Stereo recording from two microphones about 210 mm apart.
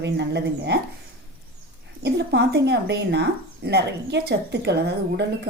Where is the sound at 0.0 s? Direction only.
55° right (ahead or behind).